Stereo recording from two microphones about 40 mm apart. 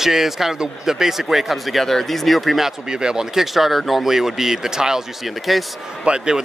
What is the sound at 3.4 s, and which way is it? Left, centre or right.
Speech, centre.